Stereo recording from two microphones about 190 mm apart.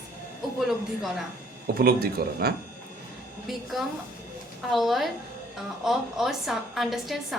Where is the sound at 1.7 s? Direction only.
55° right (ahead or behind).